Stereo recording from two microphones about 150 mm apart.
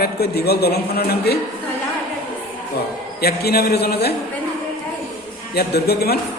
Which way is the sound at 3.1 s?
90° left.